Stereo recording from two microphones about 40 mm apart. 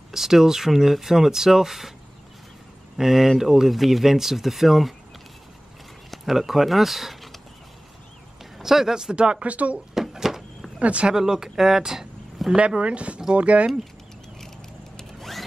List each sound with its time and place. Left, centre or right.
0.1 s speech: centre
3.0 s speech: centre
6.0 s speech: centre
8.5 s speech: centre
9.1 s speech: right
9.4 s speech: right
9.9 s a sound: centre
10.8 s speech: right
11.1 s speech: centre
12.5 s speech: right
15.1 s a sound: centre